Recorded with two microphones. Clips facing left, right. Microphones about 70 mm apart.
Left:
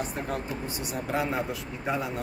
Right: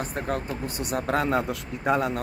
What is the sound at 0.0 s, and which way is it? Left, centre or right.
Speech, right.